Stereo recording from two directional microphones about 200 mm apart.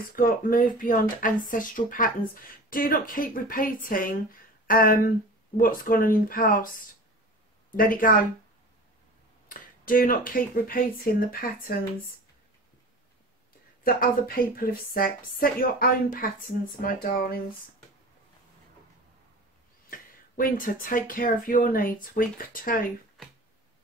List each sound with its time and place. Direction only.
0.1 s a woman's voice: 45° left (ahead or behind)
7.7 s a woman's voice: 45° left (ahead or behind)
9.5 s a woman's voice: 45° left (ahead or behind)
13.8 s a woman's voice: 45° left (ahead or behind)
19.9 s a woman's voice: 45° left (ahead or behind)
23.2 s music: centre (ahead or behind)